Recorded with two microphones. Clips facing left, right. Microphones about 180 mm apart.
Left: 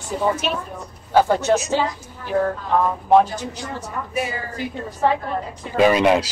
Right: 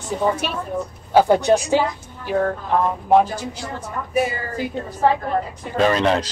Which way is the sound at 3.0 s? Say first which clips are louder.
Left 1 dB; 10° right (ahead or behind).